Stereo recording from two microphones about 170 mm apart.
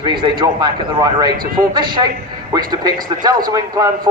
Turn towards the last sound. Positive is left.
turn(degrees=-20)  # may be behind; listen again after turning